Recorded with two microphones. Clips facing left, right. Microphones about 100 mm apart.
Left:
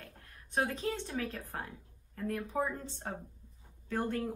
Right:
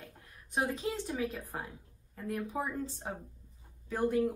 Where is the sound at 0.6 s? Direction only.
10° right (ahead or behind).